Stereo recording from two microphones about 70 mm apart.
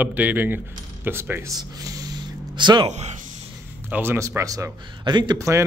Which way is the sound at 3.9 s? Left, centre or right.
Right.